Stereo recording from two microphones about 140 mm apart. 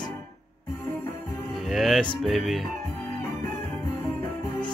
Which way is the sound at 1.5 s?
Centre (ahead or behind).